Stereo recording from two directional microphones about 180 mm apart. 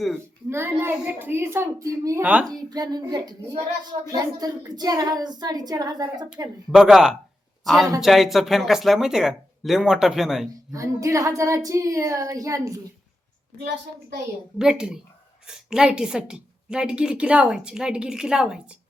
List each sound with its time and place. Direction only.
0.5 s speech: 15° right (ahead or behind)
2.6 s a woman's voice: 20° right (ahead or behind)
6.7 s a woman's voice: 5° right (ahead or behind)
10.7 s speech: 15° right (ahead or behind)
14.6 s a woman's voice: 5° right (ahead or behind)